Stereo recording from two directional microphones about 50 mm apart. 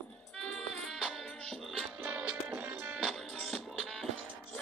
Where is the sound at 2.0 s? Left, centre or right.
Right.